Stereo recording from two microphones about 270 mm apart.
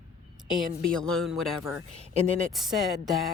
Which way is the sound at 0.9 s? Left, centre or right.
Centre.